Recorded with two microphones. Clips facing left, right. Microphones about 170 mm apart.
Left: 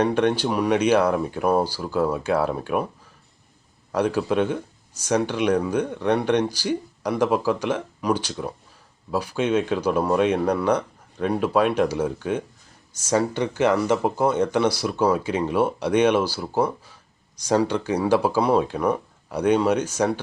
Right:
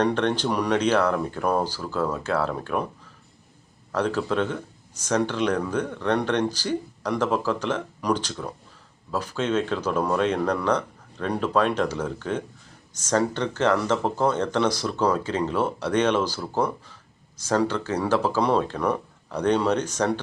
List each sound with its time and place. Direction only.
0.0 s speech: 10° left (ahead or behind)
3.9 s speech: 10° left (ahead or behind)